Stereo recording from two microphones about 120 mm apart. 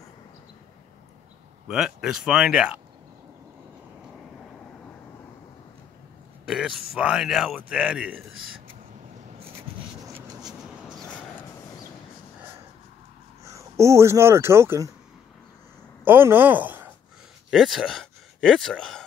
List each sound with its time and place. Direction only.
1.7 s speech: 5° right (ahead or behind)
6.4 s a sound: 5° right (ahead or behind)
6.9 s a man's voice: 5° right (ahead or behind)
10.6 s vehicle: centre (ahead or behind)
13.7 s speech: 25° right (ahead or behind)
16.0 s speech: 15° right (ahead or behind)
17.5 s speech: centre (ahead or behind)